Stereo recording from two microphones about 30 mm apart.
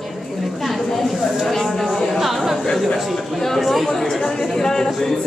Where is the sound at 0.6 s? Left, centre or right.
Centre.